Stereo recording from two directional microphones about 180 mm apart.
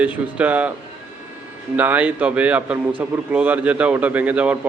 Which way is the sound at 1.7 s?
10° right (ahead or behind).